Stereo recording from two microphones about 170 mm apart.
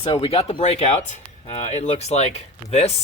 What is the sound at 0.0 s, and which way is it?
Speech, 35° left (ahead or behind).